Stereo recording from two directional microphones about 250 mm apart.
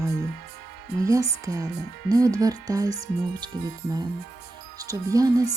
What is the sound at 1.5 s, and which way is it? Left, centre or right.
Speech, centre.